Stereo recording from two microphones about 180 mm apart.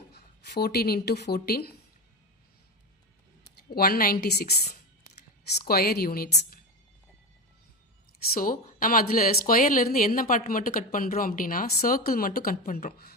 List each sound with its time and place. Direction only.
0.1 s speech: 65° left (ahead or behind)
3.8 s a woman's voice: 55° left (ahead or behind)
5.5 s a woman's voice: 60° left (ahead or behind)
8.3 s a woman's voice: 50° left (ahead or behind)